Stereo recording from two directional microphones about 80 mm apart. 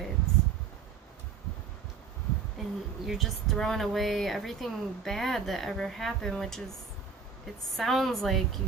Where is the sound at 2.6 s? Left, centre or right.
Centre.